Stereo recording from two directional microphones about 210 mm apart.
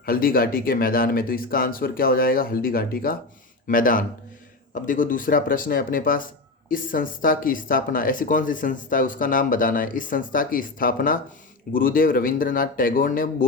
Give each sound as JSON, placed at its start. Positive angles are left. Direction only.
{"t": 0.0, "sound": "speech", "side_deg": 45}